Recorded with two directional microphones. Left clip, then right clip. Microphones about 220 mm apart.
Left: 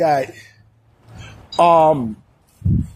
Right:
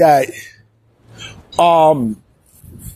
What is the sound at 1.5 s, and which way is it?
Speech, 45° right (ahead or behind).